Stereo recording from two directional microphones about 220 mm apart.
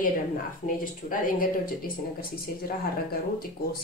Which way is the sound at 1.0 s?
40° left (ahead or behind).